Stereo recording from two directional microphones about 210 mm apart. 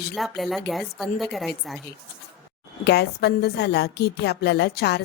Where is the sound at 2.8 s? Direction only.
55° left (ahead or behind).